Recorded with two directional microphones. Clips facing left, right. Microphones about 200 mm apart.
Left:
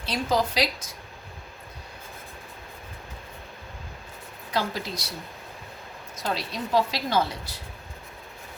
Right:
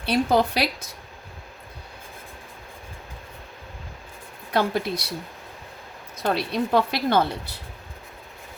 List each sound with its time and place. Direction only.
0.0 s a woman's voice: 60° right (ahead or behind)
4.5 s a woman's voice: 60° right (ahead or behind)
6.1 s a woman's voice: 60° right (ahead or behind)